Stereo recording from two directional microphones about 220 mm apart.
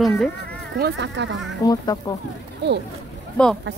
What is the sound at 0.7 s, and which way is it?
Speech, 50° right (ahead or behind).